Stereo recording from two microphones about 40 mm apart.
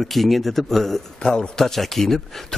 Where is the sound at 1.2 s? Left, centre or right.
Centre.